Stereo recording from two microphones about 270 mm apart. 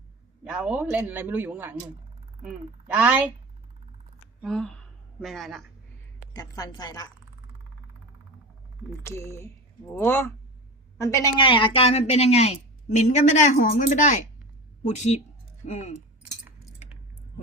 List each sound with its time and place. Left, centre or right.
0.4 s a man's voice: centre
4.4 s speech: centre
6.3 s a woman's voice: centre
9.0 s a woman's voice: centre